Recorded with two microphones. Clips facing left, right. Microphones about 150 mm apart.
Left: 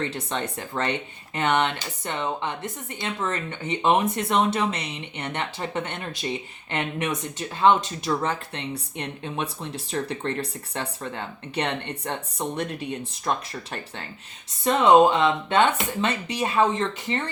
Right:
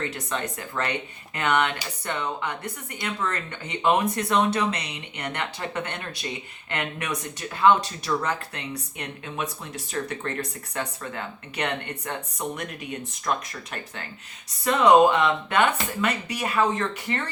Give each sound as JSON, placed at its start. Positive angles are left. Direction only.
{"t": 0.0, "sound": "speech", "side_deg": 30}
{"t": 15.2, "sound": "speech", "side_deg": 25}